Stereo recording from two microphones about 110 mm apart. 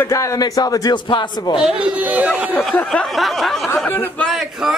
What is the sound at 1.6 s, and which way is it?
Speech, 5° right (ahead or behind).